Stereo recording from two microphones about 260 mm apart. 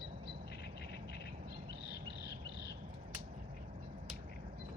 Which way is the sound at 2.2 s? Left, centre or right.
Left.